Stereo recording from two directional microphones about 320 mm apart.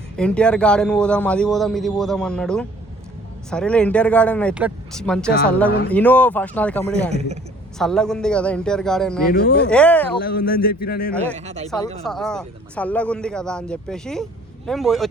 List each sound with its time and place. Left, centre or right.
0.2 s a man's voice: centre
7.1 s speech: centre
7.8 s a man's voice: centre
10.2 s a man's voice: left
11.3 s speech: right
12.0 s a man's voice: centre